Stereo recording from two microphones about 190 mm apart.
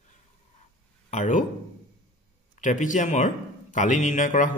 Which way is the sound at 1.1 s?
40° left (ahead or behind).